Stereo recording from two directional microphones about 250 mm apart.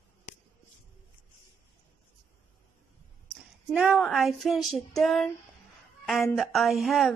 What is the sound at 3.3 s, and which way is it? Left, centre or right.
Female singing, centre.